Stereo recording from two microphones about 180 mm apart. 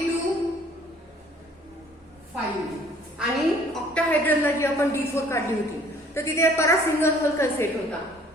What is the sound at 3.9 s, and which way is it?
A woman's voice, 10° left (ahead or behind).